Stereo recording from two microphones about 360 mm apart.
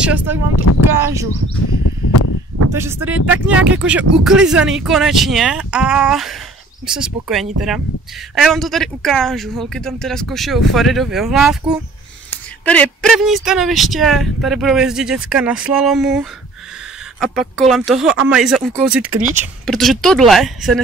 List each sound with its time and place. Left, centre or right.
0.0 s speech: centre
1.7 s a sound: left
2.7 s speech: centre